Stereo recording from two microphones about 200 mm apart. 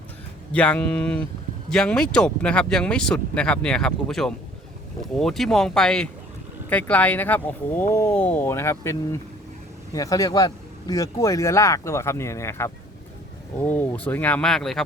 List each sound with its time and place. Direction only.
0.5 s speech: 5° left (ahead or behind)